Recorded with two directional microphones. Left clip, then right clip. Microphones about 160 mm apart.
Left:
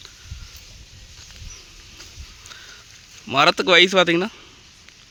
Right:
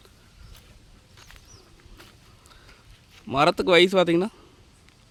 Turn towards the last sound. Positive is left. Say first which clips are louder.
# left 4 dB
turn(degrees=-10)  # may be behind; listen again after turning